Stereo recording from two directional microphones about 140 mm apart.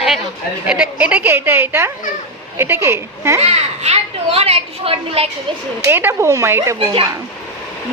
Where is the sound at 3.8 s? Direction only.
45° right (ahead or behind).